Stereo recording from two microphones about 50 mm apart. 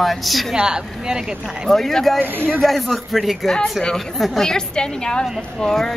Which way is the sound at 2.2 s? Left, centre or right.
Right.